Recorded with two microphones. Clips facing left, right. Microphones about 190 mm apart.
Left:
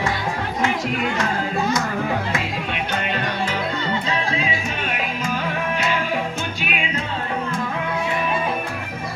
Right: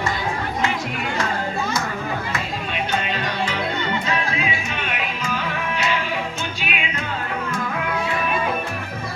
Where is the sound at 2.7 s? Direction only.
55° left (ahead or behind).